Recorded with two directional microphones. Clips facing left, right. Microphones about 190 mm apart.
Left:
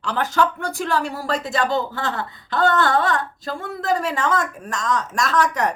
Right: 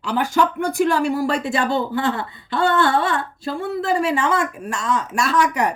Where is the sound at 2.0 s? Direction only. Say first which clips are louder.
Right 4 dB; 40° left (ahead or behind).